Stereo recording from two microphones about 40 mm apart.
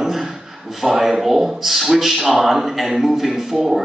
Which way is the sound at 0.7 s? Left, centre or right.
Centre.